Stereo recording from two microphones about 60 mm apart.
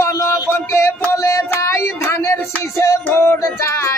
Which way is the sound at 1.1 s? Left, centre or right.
Left.